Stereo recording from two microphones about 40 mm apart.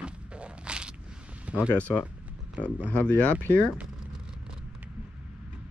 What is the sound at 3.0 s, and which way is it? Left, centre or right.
Speech, left.